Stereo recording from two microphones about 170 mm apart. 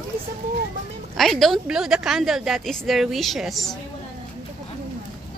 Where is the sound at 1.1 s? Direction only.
Centre (ahead or behind).